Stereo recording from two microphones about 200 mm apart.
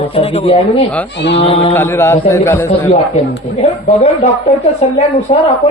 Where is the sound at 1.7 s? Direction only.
10° left (ahead or behind).